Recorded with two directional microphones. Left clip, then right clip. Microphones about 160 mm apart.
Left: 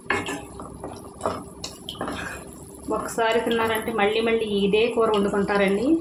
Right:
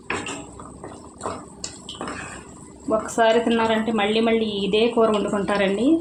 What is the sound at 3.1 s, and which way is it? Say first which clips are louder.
A woman's voice: right 3 dB; 30° right (ahead or behind).